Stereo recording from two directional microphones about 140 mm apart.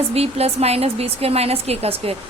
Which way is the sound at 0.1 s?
45° right (ahead or behind).